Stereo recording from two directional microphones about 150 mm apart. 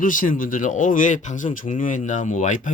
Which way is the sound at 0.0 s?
60° left (ahead or behind).